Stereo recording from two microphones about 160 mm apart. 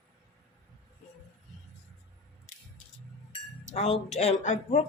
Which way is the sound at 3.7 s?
40° left (ahead or behind).